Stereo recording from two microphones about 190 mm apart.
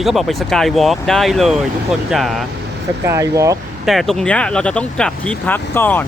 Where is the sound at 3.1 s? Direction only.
15° right (ahead or behind).